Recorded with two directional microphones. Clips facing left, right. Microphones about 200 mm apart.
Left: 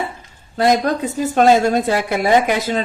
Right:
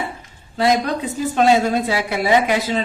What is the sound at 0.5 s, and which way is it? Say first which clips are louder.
A woman's voice: left 2 dB; 45° left (ahead or behind).